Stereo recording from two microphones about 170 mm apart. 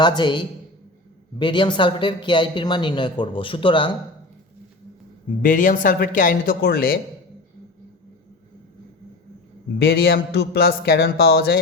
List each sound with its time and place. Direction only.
0.0 s speech: 30° left (ahead or behind)
5.4 s a man's voice: 50° left (ahead or behind)
9.7 s speech: 70° left (ahead or behind)